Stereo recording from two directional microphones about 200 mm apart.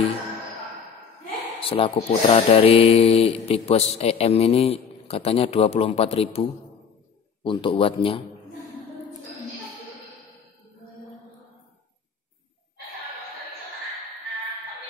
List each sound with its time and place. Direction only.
1.6 s speech: 30° left (ahead or behind)